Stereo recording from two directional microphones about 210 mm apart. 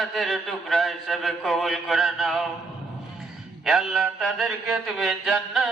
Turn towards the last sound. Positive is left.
turn(degrees=0)  # may be behind; listen again after turning